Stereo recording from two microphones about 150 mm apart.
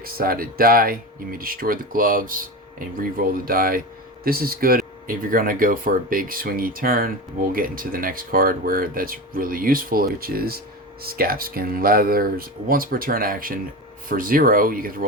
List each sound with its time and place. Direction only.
0.0 s speech: 80° right